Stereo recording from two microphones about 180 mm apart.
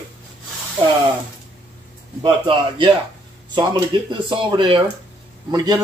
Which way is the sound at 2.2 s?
25° right (ahead or behind).